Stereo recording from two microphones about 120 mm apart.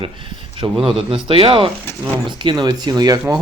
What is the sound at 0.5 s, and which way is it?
Speech, 50° right (ahead or behind).